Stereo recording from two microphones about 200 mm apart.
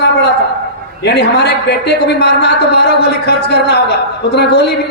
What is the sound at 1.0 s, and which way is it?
A woman's voice, 55° left (ahead or behind).